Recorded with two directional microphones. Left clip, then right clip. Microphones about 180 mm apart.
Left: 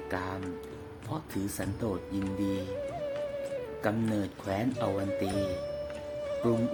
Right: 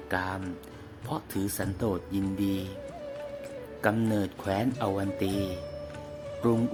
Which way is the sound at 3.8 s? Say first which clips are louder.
Right 5 dB; 20° right (ahead or behind).